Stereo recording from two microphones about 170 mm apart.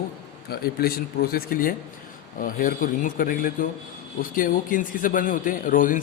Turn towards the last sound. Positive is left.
turn(degrees=50)  # may be behind; listen again after turning